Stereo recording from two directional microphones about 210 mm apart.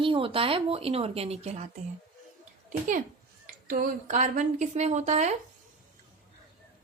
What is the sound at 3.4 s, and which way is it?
Speech, 40° right (ahead or behind).